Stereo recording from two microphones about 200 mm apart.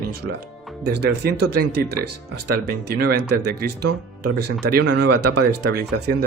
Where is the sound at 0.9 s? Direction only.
55° right (ahead or behind).